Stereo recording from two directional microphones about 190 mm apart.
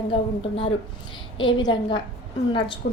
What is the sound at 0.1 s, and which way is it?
A woman's voice, 25° left (ahead or behind).